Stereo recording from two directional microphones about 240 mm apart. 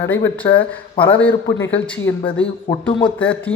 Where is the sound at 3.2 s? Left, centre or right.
Centre.